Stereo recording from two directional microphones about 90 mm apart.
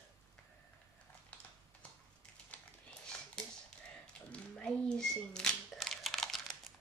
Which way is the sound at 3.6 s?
10° left (ahead or behind).